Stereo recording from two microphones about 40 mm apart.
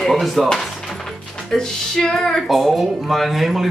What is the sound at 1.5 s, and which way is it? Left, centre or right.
Speech, centre.